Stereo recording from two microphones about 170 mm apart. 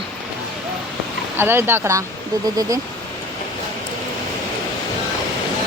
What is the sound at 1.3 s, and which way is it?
Speech, 15° right (ahead or behind).